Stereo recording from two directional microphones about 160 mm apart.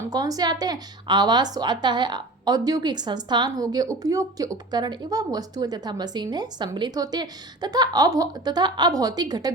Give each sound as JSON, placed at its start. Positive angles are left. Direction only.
{"t": 0.0, "sound": "a woman's voice", "side_deg": -25}